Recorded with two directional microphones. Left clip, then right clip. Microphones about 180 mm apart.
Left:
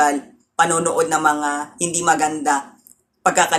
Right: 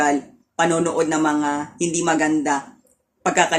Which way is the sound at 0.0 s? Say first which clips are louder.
Left 2 dB; 15° right (ahead or behind).